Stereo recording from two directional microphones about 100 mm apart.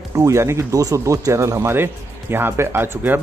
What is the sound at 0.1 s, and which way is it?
Speech, 30° right (ahead or behind).